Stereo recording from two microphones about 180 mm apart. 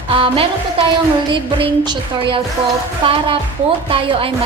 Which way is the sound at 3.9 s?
30° right (ahead or behind).